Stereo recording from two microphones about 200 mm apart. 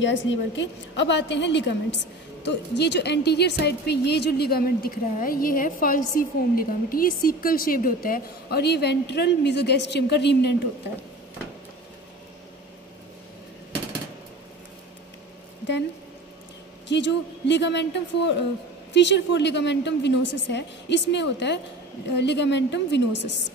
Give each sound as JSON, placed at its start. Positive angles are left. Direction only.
{"t": 0.0, "sound": "a woman's voice", "side_deg": 65}
{"t": 16.8, "sound": "a woman's voice", "side_deg": 60}